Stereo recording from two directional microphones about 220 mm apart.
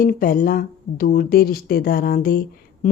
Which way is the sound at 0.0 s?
40° left (ahead or behind).